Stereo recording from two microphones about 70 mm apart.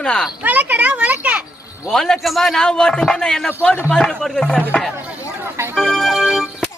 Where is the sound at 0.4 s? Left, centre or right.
Right.